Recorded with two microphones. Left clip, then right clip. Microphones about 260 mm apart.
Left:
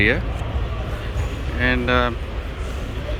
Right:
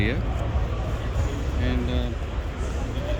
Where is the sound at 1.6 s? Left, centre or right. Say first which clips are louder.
Left 13 dB; centre.